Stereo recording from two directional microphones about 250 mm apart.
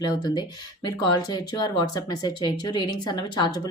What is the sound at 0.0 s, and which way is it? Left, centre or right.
Speech, centre.